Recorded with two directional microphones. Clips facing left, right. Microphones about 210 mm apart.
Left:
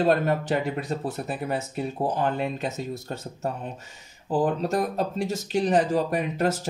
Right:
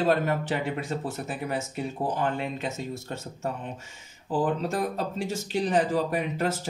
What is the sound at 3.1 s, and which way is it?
Speech, 40° left (ahead or behind).